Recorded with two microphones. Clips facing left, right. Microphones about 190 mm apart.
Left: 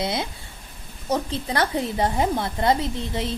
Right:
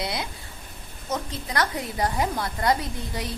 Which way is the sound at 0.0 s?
25° left (ahead or behind).